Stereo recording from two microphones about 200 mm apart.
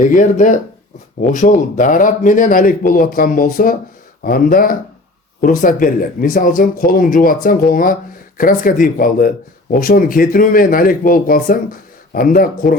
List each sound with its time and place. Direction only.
0.0 s speech: 40° left (ahead or behind)